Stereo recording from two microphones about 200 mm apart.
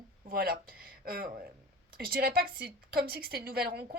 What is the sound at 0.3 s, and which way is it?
A woman's voice, 45° right (ahead or behind).